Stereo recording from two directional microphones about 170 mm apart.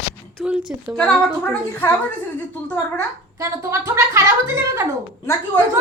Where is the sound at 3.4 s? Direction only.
20° right (ahead or behind).